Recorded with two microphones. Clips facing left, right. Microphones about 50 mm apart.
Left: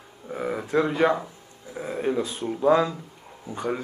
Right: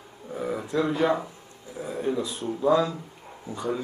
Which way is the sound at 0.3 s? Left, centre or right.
Left.